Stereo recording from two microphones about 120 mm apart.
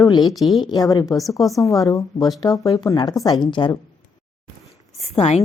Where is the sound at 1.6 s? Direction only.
30° left (ahead or behind).